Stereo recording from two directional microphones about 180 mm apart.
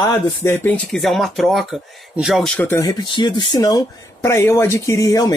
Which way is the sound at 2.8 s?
25° left (ahead or behind).